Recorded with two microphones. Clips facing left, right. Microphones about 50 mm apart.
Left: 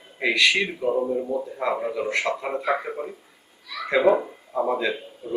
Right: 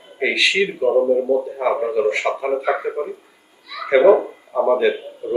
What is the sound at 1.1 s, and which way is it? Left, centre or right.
Speech, centre.